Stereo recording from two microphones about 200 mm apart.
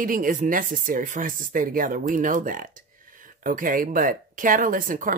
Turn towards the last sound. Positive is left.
turn(degrees=-40)  # may be behind; listen again after turning